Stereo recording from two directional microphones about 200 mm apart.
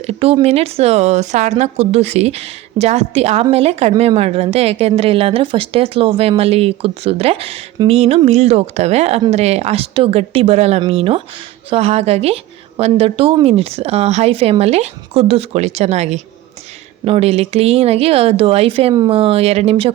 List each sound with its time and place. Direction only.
0.0 s speech: 30° right (ahead or behind)